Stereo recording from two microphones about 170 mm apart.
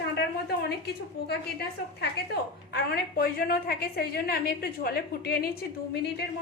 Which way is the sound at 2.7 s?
65° left (ahead or behind).